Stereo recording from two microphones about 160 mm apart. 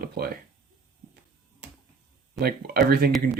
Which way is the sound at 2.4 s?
70° right (ahead or behind).